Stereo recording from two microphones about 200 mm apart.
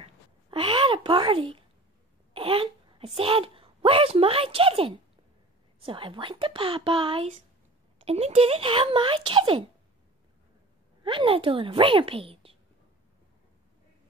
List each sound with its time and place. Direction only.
0.0 s a sound: 25° right (ahead or behind)
2.3 s a child's voice: 25° right (ahead or behind)
11.1 s speech: 25° right (ahead or behind)